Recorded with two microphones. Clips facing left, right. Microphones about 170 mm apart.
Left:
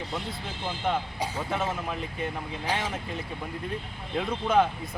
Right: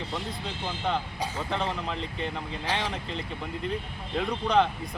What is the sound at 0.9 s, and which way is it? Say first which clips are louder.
Speech: left 1 dB; 10° left (ahead or behind).